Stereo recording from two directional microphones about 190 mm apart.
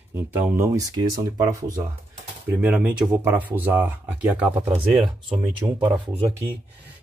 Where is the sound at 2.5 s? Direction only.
10° right (ahead or behind).